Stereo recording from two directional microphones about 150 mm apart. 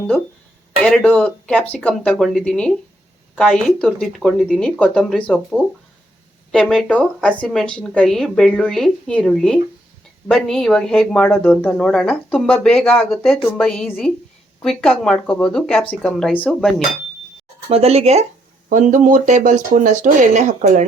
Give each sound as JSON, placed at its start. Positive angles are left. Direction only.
{"t": 0.8, "sound": "speech", "side_deg": 5}
{"t": 6.5, "sound": "speech", "side_deg": 5}
{"t": 17.7, "sound": "speech", "side_deg": -45}
{"t": 18.7, "sound": "speech", "side_deg": -60}